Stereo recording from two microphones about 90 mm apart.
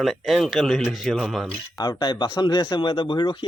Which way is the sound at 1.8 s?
55° left (ahead or behind).